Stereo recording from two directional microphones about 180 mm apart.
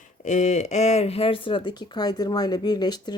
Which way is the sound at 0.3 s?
40° left (ahead or behind).